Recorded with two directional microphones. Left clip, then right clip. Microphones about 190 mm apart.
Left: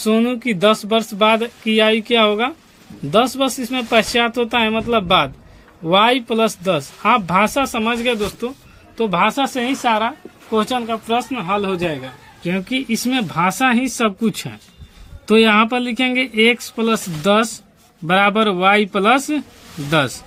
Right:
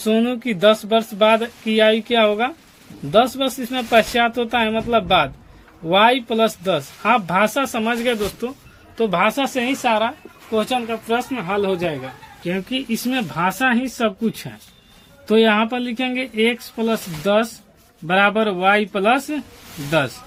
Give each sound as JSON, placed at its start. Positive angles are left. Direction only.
{"t": 0.0, "sound": "speech", "side_deg": 20}
{"t": 10.5, "sound": "speech", "side_deg": 30}
{"t": 12.4, "sound": "speech", "side_deg": 30}